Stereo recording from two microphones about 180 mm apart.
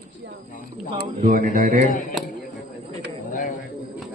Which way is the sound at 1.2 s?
45° right (ahead or behind).